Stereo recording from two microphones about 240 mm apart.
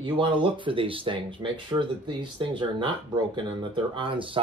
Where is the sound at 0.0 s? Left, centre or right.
Right.